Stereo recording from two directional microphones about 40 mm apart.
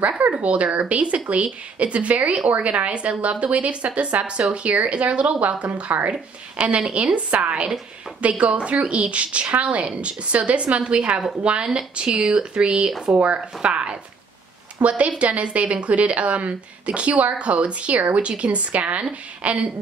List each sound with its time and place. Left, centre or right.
0.3 s a woman's voice: right
5.9 s speech: right
6.8 s a woman's voice: right
13.1 s a woman's voice: right
19.4 s speech: right